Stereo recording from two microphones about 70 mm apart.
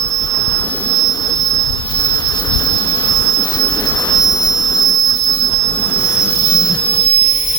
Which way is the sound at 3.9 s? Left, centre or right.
Left.